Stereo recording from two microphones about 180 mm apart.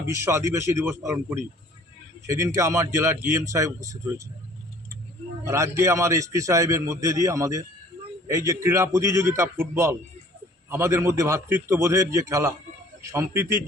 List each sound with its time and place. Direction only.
0.3 s a man's voice: 15° right (ahead or behind)
5.5 s a man's voice: 15° right (ahead or behind)